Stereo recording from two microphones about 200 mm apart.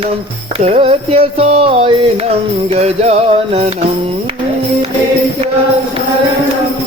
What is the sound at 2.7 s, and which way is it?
Music, 30° right (ahead or behind).